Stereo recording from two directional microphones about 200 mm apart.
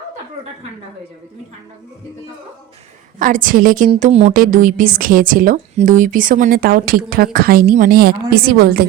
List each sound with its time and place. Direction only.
3.2 s a woman's voice: 40° right (ahead or behind)
3.9 s a woman's voice: 30° right (ahead or behind); by 8.9 s 50° right (ahead or behind)